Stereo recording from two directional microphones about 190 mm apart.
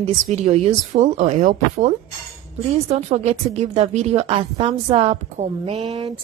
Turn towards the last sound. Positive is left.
turn(degrees=-30)  # may be behind; listen again after turning